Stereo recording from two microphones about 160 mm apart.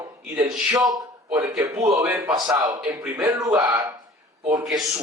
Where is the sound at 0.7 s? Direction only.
25° right (ahead or behind).